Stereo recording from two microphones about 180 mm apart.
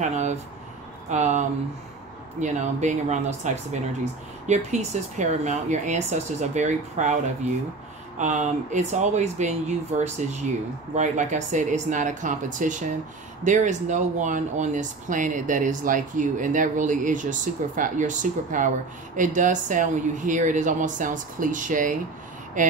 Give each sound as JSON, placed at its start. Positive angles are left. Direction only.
{"t": 0.0, "sound": "speech", "side_deg": -40}
{"t": 2.4, "sound": "speech", "side_deg": -40}